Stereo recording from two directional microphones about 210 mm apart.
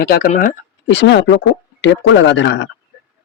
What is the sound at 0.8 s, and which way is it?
Speech, 60° left (ahead or behind).